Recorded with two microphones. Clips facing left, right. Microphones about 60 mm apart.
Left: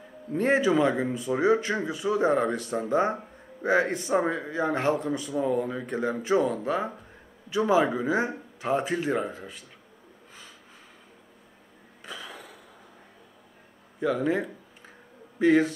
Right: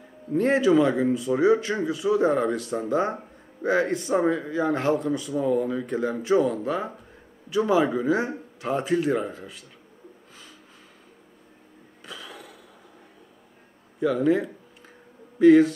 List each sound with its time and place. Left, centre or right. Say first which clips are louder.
0.3 s a man's voice: right 3 dB; centre
12.1 s a sound: even; centre
13.9 s a man's voice: right 4 dB; centre